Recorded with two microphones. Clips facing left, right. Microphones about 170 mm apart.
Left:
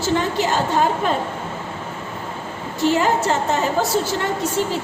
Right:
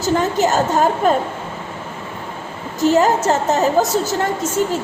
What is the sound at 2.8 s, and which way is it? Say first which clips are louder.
Speech: right 4 dB; 40° right (ahead or behind).